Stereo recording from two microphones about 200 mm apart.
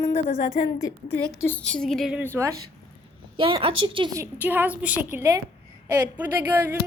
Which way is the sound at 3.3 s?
25° right (ahead or behind).